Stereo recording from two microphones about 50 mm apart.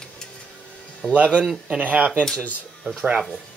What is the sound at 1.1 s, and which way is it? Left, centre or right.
Speech, right.